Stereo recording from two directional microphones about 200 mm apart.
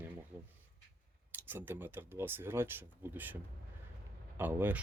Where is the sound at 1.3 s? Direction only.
10° right (ahead or behind).